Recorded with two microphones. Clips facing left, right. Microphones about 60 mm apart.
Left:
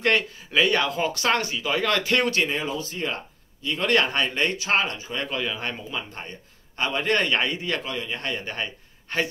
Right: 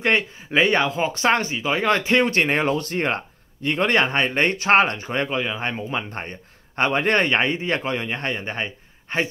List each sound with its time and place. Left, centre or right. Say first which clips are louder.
0.5 s speech: right 3 dB; right
2.3 s speech: right 5 dB; right
3.8 s a man's voice: right 2 dB; right
5.2 s speech: right 3 dB; right
5.9 s a man's voice: right 5 dB; right